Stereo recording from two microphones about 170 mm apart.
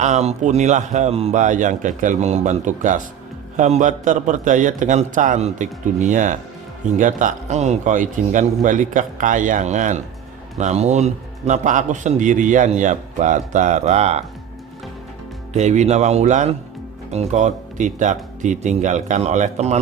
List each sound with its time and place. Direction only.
0.0 s a man's voice: 40° right (ahead or behind)
15.5 s a man's voice: 45° right (ahead or behind)